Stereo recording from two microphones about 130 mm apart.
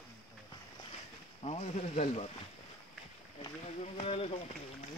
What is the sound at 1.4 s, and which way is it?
Speech, 55° left (ahead or behind).